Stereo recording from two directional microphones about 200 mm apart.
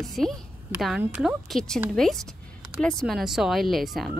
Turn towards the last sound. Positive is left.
turn(degrees=0)  # may be behind; listen again after turning